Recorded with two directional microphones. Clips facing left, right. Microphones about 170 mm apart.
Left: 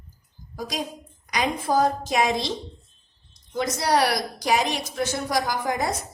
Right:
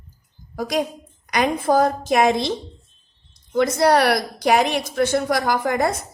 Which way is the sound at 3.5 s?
60° right (ahead or behind).